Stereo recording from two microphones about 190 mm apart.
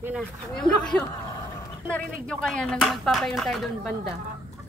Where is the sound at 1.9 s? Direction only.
5° left (ahead or behind).